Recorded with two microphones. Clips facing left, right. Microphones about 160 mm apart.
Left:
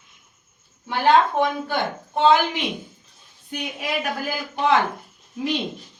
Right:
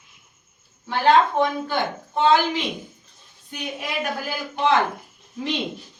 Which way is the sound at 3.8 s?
Centre (ahead or behind).